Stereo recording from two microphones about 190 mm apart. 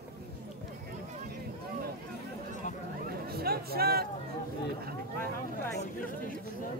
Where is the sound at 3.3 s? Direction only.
55° right (ahead or behind).